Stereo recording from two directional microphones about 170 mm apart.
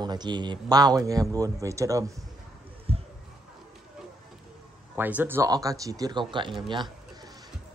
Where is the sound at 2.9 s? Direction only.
35° right (ahead or behind).